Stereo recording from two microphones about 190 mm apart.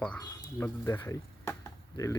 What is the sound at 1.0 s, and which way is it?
Chop, 15° left (ahead or behind).